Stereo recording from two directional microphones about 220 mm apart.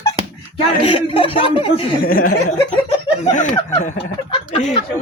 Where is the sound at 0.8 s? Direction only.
25° left (ahead or behind).